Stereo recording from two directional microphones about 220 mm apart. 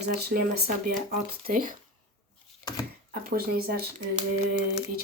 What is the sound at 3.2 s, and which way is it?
Speech, 40° right (ahead or behind).